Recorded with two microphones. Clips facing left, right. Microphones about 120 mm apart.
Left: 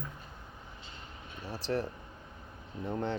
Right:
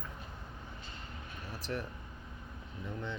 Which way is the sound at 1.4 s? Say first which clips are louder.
Left 6 dB; 30° left (ahead or behind).